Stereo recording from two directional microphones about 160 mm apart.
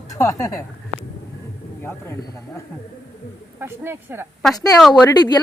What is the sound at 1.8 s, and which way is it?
Speech, 15° left (ahead or behind).